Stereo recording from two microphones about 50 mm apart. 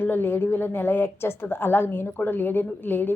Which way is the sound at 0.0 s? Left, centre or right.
Left.